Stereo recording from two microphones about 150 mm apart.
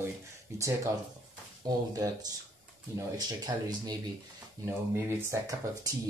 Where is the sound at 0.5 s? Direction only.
20° right (ahead or behind).